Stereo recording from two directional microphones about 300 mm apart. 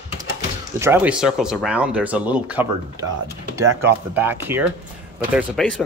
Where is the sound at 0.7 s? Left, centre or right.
Centre.